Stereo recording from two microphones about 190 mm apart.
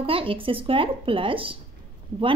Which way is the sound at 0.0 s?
30° right (ahead or behind).